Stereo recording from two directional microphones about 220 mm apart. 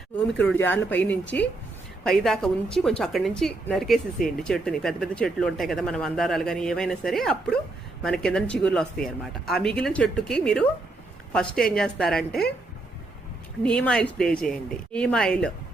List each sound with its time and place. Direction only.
0.4 s speech: 10° left (ahead or behind)
1.3 s a woman's voice: 45° left (ahead or behind)
2.0 s a woman's voice: centre (ahead or behind)
13.6 s a woman's voice: 5° left (ahead or behind)